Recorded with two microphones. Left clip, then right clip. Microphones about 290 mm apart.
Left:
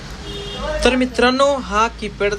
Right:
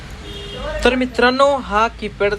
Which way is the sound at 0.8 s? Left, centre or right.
Centre.